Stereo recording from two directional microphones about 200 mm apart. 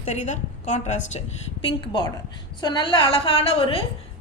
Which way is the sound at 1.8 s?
25° left (ahead or behind).